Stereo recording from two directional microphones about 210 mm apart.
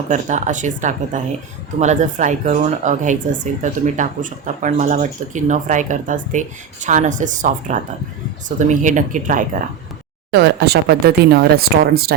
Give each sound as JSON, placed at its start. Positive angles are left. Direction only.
{"t": 0.1, "sound": "speech", "side_deg": -35}
{"t": 10.3, "sound": "speech", "side_deg": -50}